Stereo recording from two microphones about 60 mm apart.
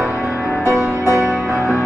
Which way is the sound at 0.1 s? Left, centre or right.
Left.